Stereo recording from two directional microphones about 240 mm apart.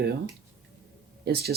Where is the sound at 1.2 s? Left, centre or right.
Right.